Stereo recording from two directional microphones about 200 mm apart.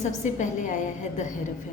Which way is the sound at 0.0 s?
40° left (ahead or behind).